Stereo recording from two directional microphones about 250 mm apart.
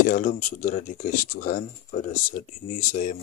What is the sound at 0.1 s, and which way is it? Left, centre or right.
Speech, left.